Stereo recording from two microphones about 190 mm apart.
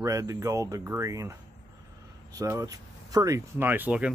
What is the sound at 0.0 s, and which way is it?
Speech, 15° right (ahead or behind).